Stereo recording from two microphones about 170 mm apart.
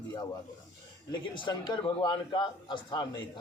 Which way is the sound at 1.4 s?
25° left (ahead or behind).